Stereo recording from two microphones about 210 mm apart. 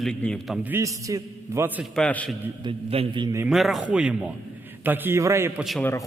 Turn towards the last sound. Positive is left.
turn(degrees=0)  # may be behind; listen again after turning